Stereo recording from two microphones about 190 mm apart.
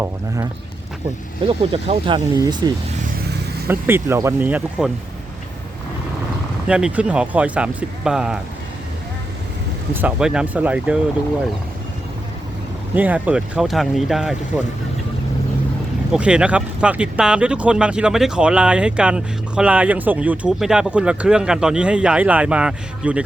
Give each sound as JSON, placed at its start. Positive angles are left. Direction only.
{"t": 1.5, "sound": "speech", "side_deg": -30}
{"t": 3.7, "sound": "speech", "side_deg": -10}
{"t": 6.7, "sound": "speech", "side_deg": -5}
{"t": 9.9, "sound": "speech", "side_deg": -5}
{"t": 12.9, "sound": "speech", "side_deg": -10}
{"t": 16.1, "sound": "speech", "side_deg": -5}